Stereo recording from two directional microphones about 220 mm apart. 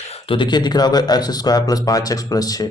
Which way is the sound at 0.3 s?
20° left (ahead or behind).